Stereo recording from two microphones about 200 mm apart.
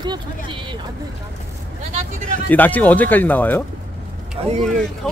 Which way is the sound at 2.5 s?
10° left (ahead or behind).